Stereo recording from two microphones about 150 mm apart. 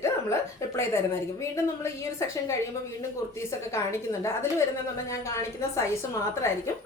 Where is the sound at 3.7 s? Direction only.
20° left (ahead or behind).